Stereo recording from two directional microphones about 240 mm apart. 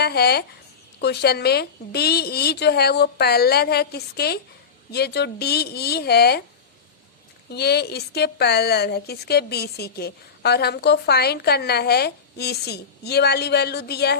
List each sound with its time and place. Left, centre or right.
0.0 s a woman's voice: left
7.5 s a woman's voice: left